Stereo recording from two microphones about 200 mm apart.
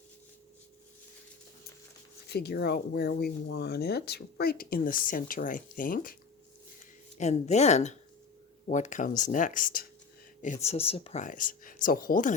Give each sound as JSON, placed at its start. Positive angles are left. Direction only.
{"t": 2.3, "sound": "speech", "side_deg": 55}
{"t": 7.2, "sound": "speech", "side_deg": 35}